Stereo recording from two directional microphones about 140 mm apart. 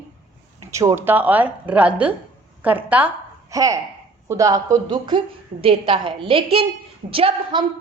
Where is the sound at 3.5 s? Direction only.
25° right (ahead or behind).